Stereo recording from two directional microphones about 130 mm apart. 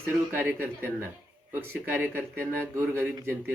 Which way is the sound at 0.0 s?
15° right (ahead or behind).